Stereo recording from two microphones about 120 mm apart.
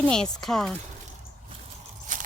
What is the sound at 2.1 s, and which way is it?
Biting, 90° right.